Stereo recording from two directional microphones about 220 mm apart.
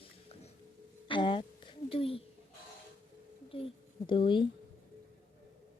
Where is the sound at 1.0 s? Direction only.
20° left (ahead or behind).